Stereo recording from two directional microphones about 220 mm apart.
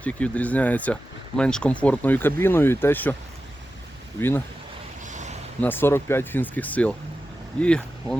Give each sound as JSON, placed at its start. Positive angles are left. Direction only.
{"t": 0.0, "sound": "speech", "side_deg": 5}
{"t": 4.2, "sound": "speech", "side_deg": 10}
{"t": 5.0, "sound": "a sound", "side_deg": -35}
{"t": 5.5, "sound": "speech", "side_deg": 10}